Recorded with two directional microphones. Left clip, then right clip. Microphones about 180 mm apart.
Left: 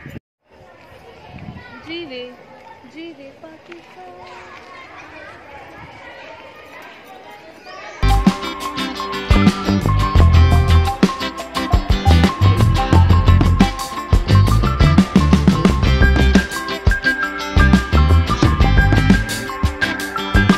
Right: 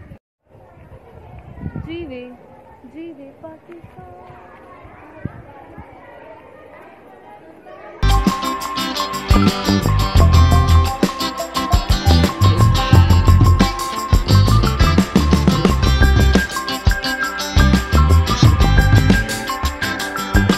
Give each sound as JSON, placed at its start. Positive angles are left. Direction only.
{"t": 1.9, "sound": "speech", "side_deg": -50}
{"t": 8.0, "sound": "music", "side_deg": 0}